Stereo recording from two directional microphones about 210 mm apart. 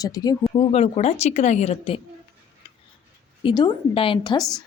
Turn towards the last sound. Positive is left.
turn(degrees=25)  # may be behind; listen again after turning